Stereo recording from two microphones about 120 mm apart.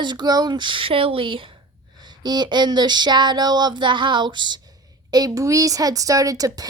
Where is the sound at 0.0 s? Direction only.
35° right (ahead or behind).